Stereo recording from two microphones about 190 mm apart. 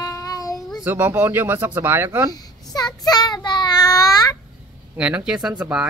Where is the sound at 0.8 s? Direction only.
10° right (ahead or behind).